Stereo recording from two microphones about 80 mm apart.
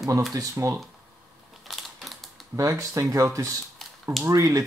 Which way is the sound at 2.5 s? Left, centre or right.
Right.